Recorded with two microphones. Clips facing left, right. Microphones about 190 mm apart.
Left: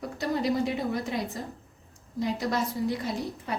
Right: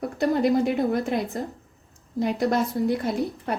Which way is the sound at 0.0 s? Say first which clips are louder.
Right 6 dB; 55° right (ahead or behind).